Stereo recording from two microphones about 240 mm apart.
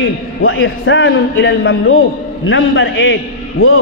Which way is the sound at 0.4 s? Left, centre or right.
Left.